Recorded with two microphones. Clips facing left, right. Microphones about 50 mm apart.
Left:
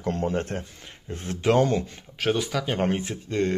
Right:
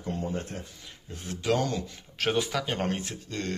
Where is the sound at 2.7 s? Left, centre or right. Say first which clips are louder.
Left 5 dB; centre.